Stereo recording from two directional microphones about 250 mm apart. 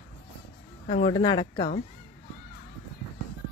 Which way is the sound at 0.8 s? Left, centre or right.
Left.